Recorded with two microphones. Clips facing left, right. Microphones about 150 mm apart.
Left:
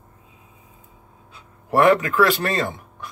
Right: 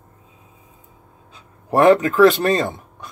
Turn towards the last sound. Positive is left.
turn(degrees=-20)  # may be behind; listen again after turning